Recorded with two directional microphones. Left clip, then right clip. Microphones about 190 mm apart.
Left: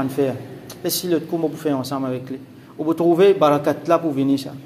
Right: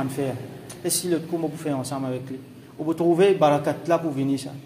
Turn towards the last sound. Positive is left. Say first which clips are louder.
# left 5 dB
turn(degrees=15)  # may be behind; listen again after turning